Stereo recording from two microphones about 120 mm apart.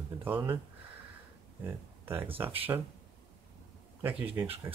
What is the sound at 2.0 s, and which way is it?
Speech, 15° right (ahead or behind).